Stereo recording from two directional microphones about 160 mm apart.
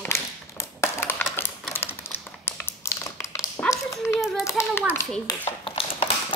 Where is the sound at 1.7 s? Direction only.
15° left (ahead or behind).